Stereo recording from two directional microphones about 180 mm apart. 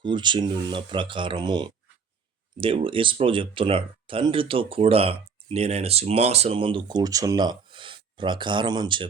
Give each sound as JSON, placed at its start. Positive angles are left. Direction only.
{"t": 0.0, "sound": "speech", "side_deg": -25}